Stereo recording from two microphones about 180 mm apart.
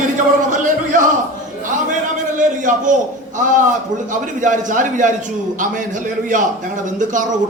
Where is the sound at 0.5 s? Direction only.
45° right (ahead or behind).